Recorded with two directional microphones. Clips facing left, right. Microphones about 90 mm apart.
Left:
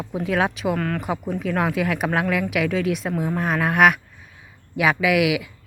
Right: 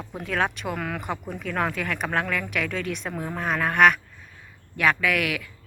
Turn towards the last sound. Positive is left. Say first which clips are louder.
# left 6 dB
turn(degrees=10)  # may be behind; listen again after turning